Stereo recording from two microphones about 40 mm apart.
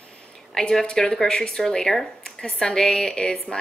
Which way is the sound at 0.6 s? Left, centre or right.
Centre.